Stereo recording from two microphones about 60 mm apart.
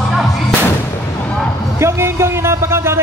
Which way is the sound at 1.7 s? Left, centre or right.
Right.